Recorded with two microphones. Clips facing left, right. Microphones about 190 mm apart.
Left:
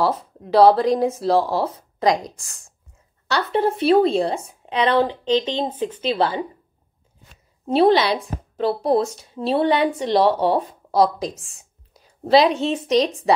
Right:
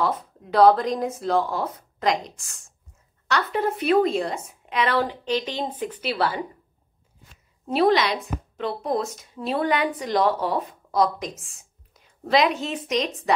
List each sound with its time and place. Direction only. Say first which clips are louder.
0.0 s a woman's voice: left 4 dB; 30° left (ahead or behind)
7.6 s speech: left 4 dB; 30° left (ahead or behind)